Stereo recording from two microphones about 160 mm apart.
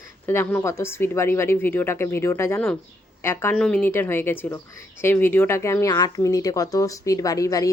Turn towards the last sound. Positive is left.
turn(degrees=20)  # may be behind; listen again after turning